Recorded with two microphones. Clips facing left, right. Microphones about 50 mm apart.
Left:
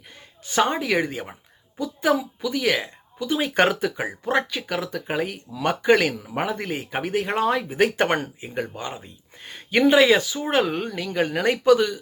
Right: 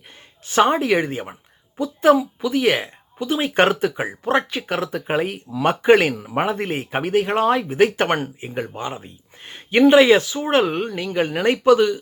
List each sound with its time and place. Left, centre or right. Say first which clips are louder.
0.4 s speech: right 5 dB; right
1.8 s speech: right 6 dB; right